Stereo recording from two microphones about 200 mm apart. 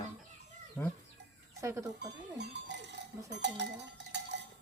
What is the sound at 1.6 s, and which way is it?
Speech, 15° right (ahead or behind).